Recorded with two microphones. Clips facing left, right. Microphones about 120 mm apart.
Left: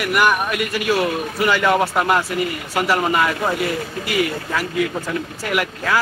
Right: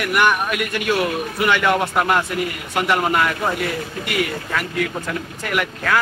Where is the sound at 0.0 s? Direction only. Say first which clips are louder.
Left 1 dB; centre (ahead or behind).